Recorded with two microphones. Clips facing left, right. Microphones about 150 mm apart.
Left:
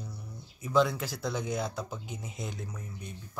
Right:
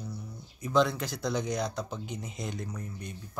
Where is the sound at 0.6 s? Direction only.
5° left (ahead or behind).